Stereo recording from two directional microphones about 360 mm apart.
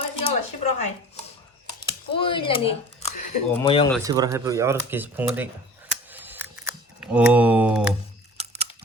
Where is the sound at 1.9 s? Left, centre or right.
Centre.